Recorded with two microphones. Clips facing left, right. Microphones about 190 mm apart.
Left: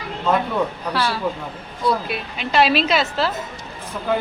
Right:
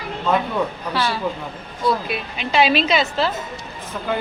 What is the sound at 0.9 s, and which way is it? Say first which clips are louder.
A woman's voice: even; centre (ahead or behind).